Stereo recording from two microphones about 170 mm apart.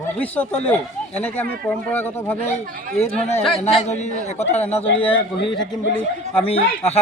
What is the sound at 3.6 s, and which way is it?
A man's voice, 40° left (ahead or behind).